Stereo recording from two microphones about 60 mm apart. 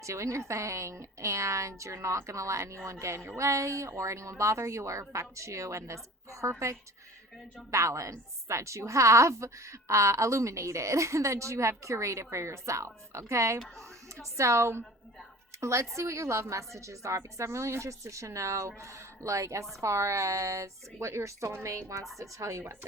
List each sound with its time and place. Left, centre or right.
0.0 s a woman's voice: right